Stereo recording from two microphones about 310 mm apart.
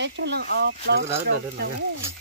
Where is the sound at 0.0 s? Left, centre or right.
Right.